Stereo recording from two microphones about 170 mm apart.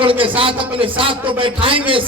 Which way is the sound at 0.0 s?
30° right (ahead or behind).